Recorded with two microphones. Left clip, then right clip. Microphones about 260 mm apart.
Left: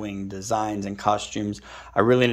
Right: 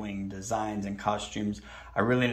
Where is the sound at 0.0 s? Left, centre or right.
Left.